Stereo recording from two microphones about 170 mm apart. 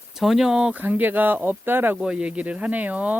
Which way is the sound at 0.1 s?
Centre (ahead or behind).